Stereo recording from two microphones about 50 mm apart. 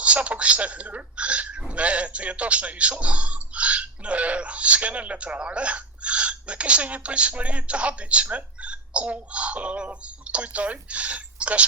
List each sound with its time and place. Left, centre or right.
0.0 s speech: right